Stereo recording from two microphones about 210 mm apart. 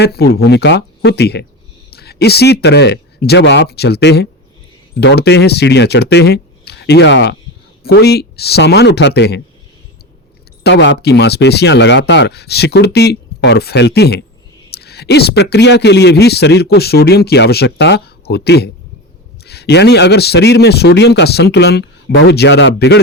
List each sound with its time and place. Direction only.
0.0 s speech: 50° left (ahead or behind)
10.6 s speech: 55° left (ahead or behind)